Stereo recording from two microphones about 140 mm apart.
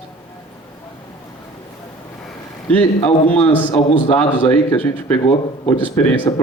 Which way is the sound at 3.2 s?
10° left (ahead or behind).